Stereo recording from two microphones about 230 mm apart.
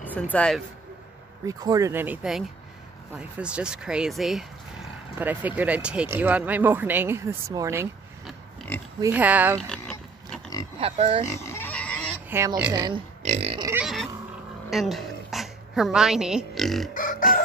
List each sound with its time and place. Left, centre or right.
0.0 s speech: centre
1.4 s speech: centre
8.5 s pig: centre
9.0 s speech: centre
9.7 s pig: centre
10.8 s speech: right
11.3 s pig: centre
12.3 s speech: centre
12.8 s speech: right
13.7 s pig: centre
14.7 s speech: centre
16.9 s burping: left